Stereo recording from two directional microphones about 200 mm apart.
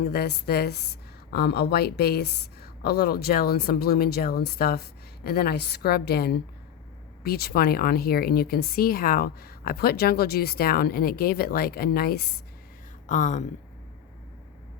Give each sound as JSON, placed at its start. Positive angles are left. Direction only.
{"t": 0.0, "sound": "a woman's voice", "side_deg": 55}
{"t": 13.1, "sound": "speech", "side_deg": 40}